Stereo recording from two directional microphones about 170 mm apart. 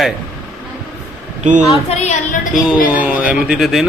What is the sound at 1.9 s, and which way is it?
Speech, 45° left (ahead or behind).